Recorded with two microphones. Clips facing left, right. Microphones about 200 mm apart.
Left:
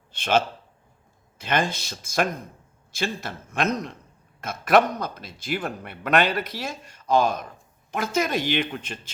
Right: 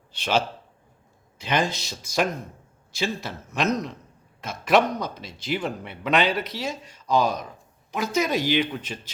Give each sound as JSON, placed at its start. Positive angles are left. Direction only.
{"t": 0.1, "sound": "a man's voice", "side_deg": 50}